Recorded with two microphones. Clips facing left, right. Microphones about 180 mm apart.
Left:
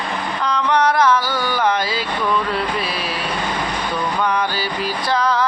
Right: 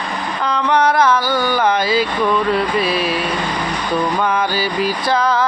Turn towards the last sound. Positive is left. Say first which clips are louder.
# right 2 dB
turn(degrees=0)  # may be behind; listen again after turning